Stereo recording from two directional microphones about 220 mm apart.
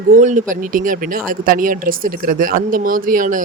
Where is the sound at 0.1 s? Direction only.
35° right (ahead or behind).